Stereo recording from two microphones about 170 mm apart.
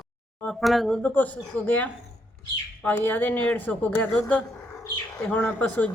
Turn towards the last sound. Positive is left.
turn(degrees=10)  # may be behind; listen again after turning